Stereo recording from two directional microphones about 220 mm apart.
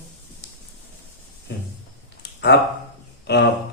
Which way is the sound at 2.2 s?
50° left (ahead or behind).